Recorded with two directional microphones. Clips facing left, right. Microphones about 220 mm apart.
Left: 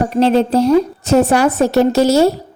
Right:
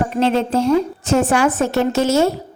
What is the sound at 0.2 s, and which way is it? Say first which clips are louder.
A woman's voice: left 5 dB; 35° left (ahead or behind).